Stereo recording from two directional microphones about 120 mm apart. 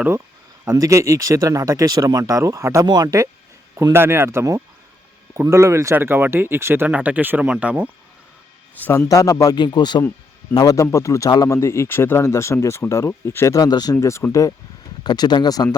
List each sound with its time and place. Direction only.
0.8 s speech: 25° right (ahead or behind)
3.9 s speech: 20° right (ahead or behind)
8.8 s a man's voice: 25° left (ahead or behind)
13.9 s speech: 25° left (ahead or behind)
15.0 s a man's voice: 35° left (ahead or behind)